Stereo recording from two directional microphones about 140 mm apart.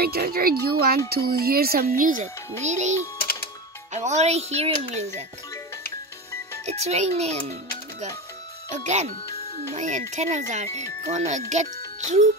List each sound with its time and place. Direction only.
0.0 s speech: 90° right
2.6 s speech: 55° right (ahead or behind)
6.6 s speech: 50° right (ahead or behind)
8.6 s speech: 55° right (ahead or behind)